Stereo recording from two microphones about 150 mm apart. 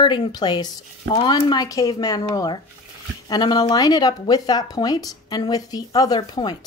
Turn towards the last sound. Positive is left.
turn(degrees=30)  # may be behind; listen again after turning